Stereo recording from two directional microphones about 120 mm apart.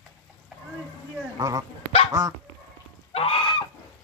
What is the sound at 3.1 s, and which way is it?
Goose, 50° left (ahead or behind).